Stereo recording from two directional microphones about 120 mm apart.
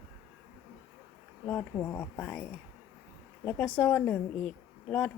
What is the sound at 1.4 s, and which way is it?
Speech, 15° left (ahead or behind).